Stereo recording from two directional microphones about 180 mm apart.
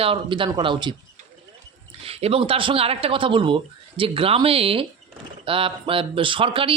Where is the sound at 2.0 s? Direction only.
35° right (ahead or behind).